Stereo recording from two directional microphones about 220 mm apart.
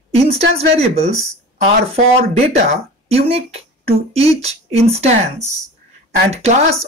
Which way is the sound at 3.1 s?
30° right (ahead or behind).